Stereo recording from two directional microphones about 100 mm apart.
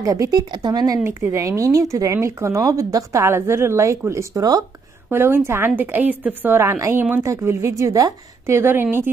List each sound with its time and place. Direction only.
0.0 s speech: 35° right (ahead or behind)
1.0 s speech: 35° right (ahead or behind)
5.1 s a woman's voice: 25° right (ahead or behind)